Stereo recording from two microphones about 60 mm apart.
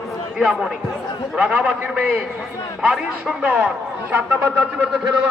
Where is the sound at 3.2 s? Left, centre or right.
Right.